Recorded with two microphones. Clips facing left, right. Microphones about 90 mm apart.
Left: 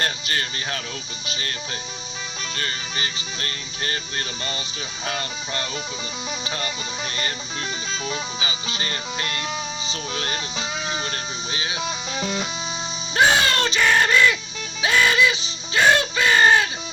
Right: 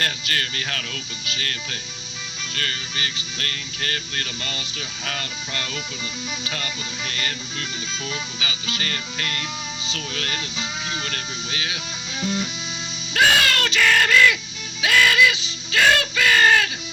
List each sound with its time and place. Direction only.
0.0 s music: 25° left (ahead or behind)
2.6 s music: 25° left (ahead or behind)
13.1 s a sound: 25° left (ahead or behind)